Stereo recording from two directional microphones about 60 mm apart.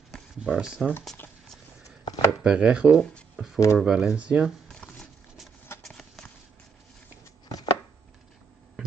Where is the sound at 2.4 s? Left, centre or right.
Centre.